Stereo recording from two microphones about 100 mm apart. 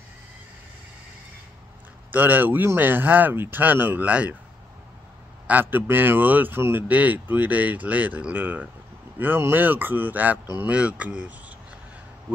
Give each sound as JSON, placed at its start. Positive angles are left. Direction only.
{"t": 2.0, "sound": "speech", "side_deg": -20}
{"t": 5.5, "sound": "speech", "side_deg": -20}